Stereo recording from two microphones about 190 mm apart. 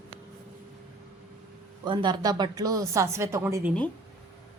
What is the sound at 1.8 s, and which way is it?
Speech, 25° right (ahead or behind).